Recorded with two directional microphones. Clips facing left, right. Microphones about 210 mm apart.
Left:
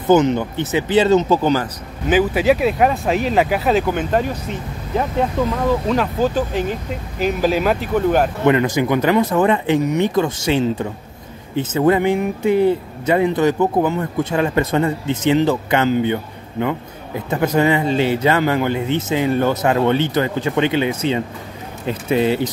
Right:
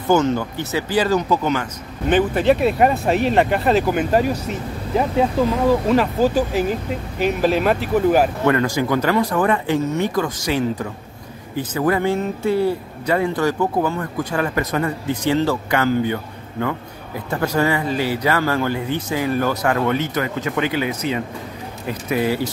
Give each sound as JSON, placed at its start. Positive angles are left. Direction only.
{"t": 0.0, "sound": "speech", "side_deg": 20}
{"t": 2.0, "sound": "speech", "side_deg": 5}
{"t": 8.5, "sound": "speech", "side_deg": 20}